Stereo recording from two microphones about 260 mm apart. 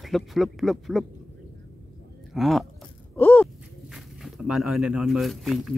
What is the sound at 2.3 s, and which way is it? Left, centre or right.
Speech, centre.